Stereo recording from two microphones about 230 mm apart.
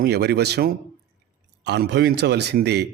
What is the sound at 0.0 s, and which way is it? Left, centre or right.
Speech, right.